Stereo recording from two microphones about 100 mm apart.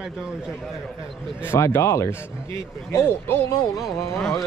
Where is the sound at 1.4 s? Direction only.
25° left (ahead or behind).